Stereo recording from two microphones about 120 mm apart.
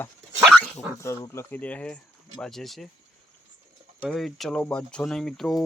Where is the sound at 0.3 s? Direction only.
Centre (ahead or behind).